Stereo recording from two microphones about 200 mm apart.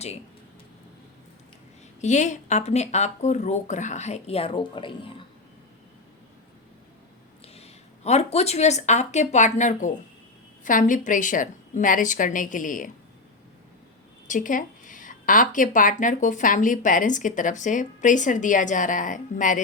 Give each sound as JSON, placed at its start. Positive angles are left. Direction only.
{"t": 2.0, "sound": "speech", "side_deg": 35}
{"t": 7.4, "sound": "speech", "side_deg": 30}
{"t": 14.3, "sound": "speech", "side_deg": 40}